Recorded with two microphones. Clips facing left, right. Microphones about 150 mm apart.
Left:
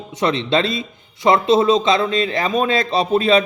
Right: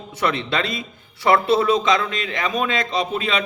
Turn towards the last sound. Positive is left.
turn(degrees=35)  # may be behind; listen again after turning